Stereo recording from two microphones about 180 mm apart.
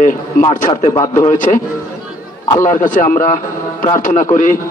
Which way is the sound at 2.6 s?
50° left (ahead or behind).